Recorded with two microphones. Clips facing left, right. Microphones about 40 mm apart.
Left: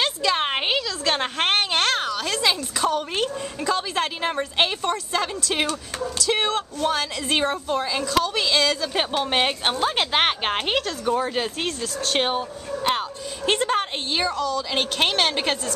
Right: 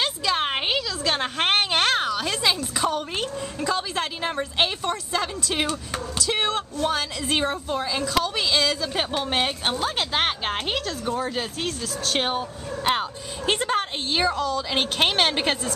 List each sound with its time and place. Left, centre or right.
0.0 s a sound: centre
1.5 s a woman's voice: centre
3.2 s speech: centre
5.7 s a woman's voice: centre
8.9 s speech: centre
13.5 s a woman's voice: centre
14.3 s a woman's voice: centre